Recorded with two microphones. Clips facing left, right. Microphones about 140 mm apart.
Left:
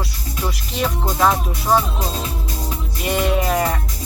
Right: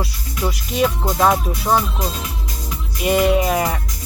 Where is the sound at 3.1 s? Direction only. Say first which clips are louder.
Right 3 dB; 10° right (ahead or behind).